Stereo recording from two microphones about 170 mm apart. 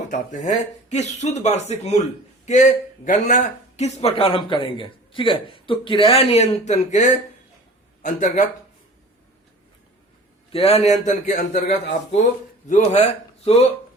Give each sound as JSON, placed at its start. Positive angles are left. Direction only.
{"t": 0.1, "sound": "a man's voice", "side_deg": 45}
{"t": 10.5, "sound": "a man's voice", "side_deg": 35}